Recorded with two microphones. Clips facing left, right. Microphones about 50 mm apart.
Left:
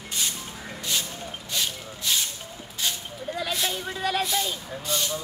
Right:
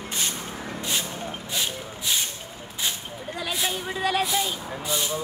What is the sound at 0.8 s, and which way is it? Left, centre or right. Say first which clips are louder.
Vehicle: even; right.